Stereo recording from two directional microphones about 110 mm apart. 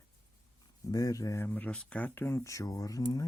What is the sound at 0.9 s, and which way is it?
Speech, 35° left (ahead or behind).